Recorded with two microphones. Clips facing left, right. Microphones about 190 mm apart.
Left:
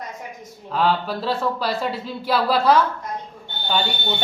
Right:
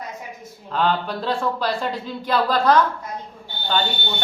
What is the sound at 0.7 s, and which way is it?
Speech, 5° left (ahead or behind).